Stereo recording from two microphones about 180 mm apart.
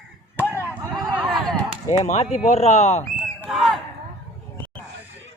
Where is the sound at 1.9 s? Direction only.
40° left (ahead or behind).